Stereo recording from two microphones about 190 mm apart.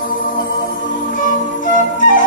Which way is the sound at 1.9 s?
45° left (ahead or behind).